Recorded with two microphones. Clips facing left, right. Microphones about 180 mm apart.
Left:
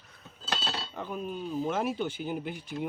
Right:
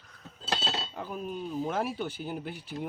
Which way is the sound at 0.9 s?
5° right (ahead or behind).